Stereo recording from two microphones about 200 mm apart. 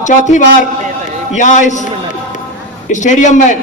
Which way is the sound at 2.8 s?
35° left (ahead or behind).